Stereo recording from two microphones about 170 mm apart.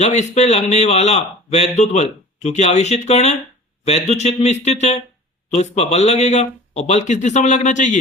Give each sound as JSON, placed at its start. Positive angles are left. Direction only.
{"t": 0.0, "sound": "a man's voice", "side_deg": 40}